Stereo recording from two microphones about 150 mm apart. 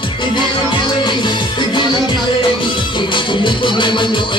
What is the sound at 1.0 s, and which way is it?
Music, 30° left (ahead or behind).